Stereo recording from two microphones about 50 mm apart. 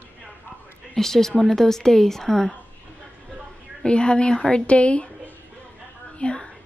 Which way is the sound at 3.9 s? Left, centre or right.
Centre.